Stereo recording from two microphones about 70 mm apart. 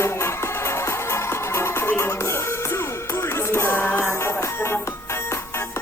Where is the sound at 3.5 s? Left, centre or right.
Left.